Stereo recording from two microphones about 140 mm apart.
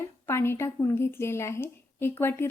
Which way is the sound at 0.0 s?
20° left (ahead or behind).